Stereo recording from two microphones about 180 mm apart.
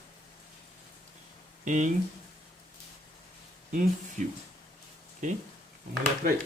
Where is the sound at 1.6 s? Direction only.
45° right (ahead or behind).